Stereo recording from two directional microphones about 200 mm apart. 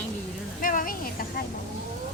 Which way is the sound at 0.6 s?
45° left (ahead or behind).